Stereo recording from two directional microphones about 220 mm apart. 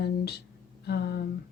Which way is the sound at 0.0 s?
45° left (ahead or behind).